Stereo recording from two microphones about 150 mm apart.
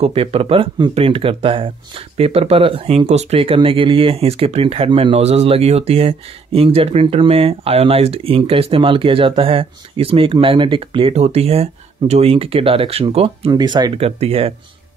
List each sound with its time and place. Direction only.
0.0 s speech: 40° right (ahead or behind)
13.5 s speech: 30° right (ahead or behind)
13.9 s speech: 40° right (ahead or behind)